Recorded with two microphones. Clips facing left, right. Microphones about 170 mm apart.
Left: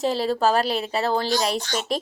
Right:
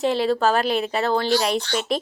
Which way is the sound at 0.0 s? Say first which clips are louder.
Right 2 dB; 35° left (ahead or behind).